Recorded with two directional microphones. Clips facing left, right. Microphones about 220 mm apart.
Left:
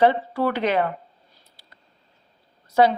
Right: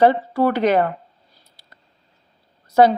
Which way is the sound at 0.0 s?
40° right (ahead or behind).